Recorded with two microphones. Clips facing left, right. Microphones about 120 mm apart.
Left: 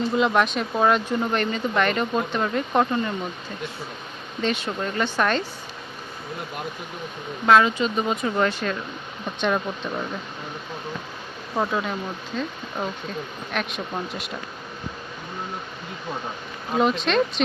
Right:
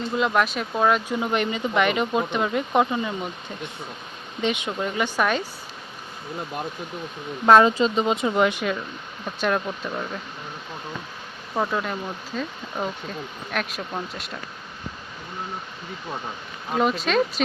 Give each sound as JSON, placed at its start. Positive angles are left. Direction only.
{"t": 0.1, "sound": "speech", "side_deg": 0}
{"t": 1.0, "sound": "speech", "side_deg": -10}
{"t": 4.4, "sound": "speech", "side_deg": -15}
{"t": 7.5, "sound": "speech", "side_deg": -35}
{"t": 8.4, "sound": "speech", "side_deg": -15}
{"t": 11.5, "sound": "speech", "side_deg": 0}
{"t": 16.7, "sound": "speech", "side_deg": 0}